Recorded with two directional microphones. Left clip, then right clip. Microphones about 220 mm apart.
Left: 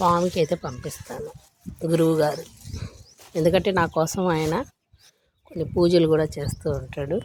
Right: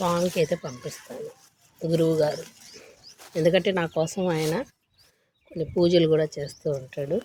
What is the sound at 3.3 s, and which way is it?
Speech, 15° left (ahead or behind).